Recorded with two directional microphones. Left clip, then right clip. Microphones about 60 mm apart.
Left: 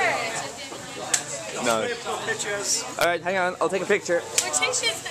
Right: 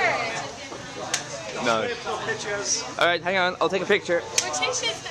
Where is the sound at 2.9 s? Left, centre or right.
Centre.